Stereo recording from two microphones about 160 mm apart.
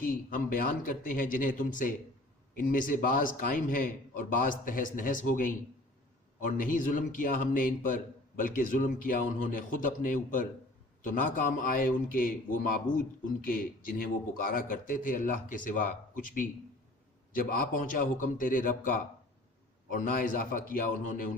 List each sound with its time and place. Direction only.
0.0 s a man's voice: 60° left (ahead or behind)